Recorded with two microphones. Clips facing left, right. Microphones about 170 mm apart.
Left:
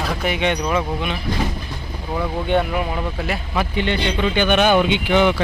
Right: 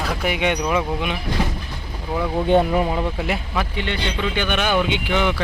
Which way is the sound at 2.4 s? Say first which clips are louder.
Right 4 dB; 35° right (ahead or behind).